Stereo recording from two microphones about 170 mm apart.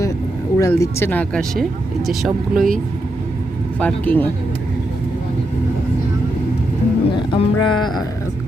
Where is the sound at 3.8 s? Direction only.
10° left (ahead or behind).